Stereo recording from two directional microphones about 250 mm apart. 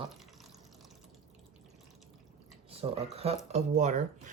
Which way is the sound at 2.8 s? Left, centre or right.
Right.